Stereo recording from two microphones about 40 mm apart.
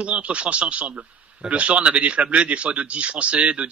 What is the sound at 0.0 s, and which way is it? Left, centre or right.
Speech, right.